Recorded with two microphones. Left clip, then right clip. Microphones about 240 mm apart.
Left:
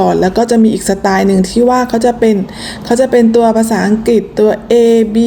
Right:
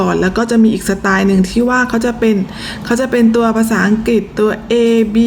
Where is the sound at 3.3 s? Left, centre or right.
Right.